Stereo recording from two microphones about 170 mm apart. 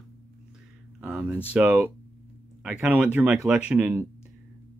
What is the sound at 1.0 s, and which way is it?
Speech, 10° right (ahead or behind).